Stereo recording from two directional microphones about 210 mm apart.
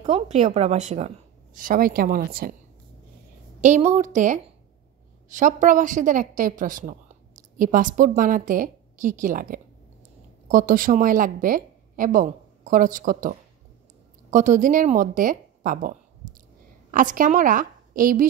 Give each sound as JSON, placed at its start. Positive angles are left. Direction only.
{"t": 0.0, "sound": "a woman's voice", "side_deg": -35}
{"t": 3.6, "sound": "a woman's voice", "side_deg": -35}